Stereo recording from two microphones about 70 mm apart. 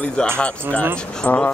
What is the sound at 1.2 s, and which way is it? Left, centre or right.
Speech, centre.